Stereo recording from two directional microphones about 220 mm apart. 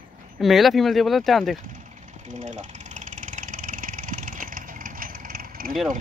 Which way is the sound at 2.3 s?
35° right (ahead or behind).